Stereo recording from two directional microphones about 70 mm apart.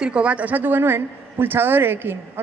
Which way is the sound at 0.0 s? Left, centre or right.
Centre.